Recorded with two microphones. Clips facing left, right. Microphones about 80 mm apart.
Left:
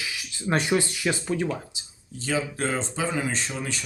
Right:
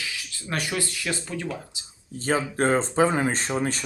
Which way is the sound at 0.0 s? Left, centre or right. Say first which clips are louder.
Left 3 dB; centre.